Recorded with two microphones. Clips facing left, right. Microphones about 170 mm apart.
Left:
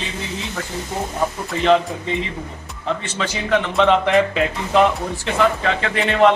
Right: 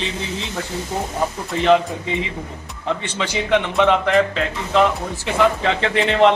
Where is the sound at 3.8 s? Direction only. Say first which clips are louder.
Left 2 dB; 5° right (ahead or behind).